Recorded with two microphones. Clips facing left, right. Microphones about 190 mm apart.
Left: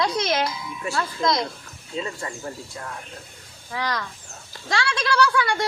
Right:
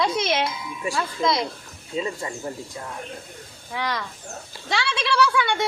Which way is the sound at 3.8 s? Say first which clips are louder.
Even; centre (ahead or behind).